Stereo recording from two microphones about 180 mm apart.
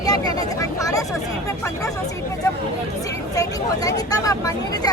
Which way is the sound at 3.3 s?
20° left (ahead or behind).